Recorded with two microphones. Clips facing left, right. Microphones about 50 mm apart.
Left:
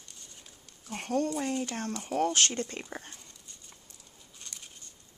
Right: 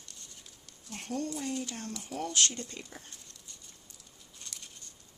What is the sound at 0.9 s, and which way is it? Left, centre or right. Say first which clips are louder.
Speech: left 6 dB; left.